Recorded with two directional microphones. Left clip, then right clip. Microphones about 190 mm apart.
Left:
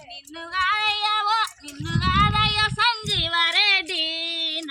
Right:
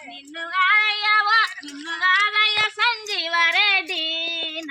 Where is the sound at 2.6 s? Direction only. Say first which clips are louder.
Even; 10° left (ahead or behind).